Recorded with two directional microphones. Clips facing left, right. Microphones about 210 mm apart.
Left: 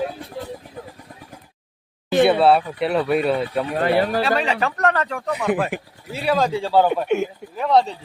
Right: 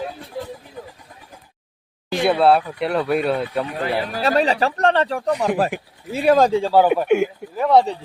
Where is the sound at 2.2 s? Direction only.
Centre (ahead or behind).